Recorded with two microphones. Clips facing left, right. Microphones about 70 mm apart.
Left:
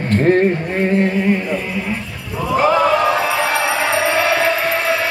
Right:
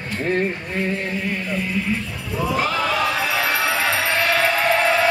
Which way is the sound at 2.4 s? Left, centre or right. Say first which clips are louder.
Left 7 dB; left.